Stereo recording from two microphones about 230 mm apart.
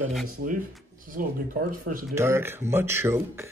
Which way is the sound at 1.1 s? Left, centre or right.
Right.